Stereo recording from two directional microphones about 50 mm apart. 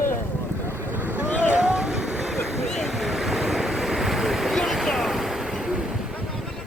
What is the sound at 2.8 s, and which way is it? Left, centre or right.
Waves, centre.